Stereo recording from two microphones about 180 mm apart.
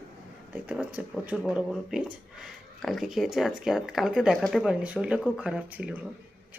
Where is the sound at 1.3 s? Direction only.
Centre (ahead or behind).